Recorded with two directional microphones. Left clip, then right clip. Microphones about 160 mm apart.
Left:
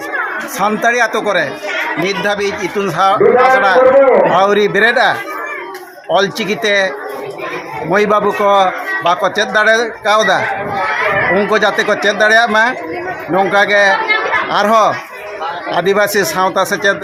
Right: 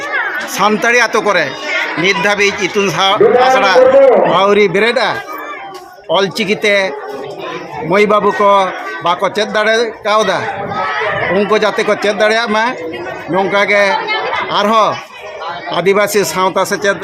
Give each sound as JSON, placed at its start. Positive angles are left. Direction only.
{"t": 0.6, "sound": "a man's voice", "side_deg": -15}